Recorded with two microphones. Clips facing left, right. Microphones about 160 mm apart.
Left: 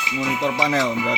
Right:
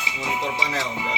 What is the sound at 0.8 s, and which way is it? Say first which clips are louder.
Speech: left 7 dB; 25° right (ahead or behind).